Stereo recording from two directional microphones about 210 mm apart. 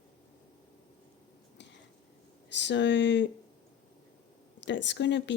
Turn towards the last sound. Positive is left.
turn(degrees=55)  # may be behind; listen again after turning